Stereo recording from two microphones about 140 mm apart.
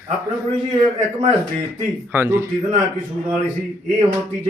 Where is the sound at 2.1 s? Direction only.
15° right (ahead or behind).